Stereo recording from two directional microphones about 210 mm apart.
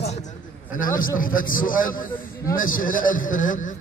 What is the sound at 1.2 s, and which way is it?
A man's voice, 40° left (ahead or behind).